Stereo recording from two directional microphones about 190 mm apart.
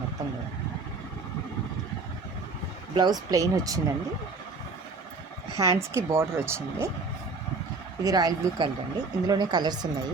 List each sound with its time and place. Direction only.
2.9 s speech: 20° right (ahead or behind)
5.5 s speech: 15° right (ahead or behind)
8.0 s speech: 20° right (ahead or behind)